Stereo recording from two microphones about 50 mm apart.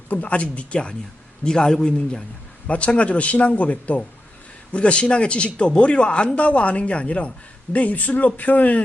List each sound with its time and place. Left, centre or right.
0.1 s a man's voice: left
2.6 s speech: left